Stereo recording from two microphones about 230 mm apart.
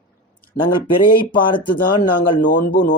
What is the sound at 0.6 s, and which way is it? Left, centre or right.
Speech, left.